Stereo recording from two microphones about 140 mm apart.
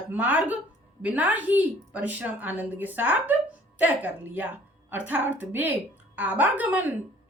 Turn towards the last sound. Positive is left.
turn(degrees=-10)  # may be behind; listen again after turning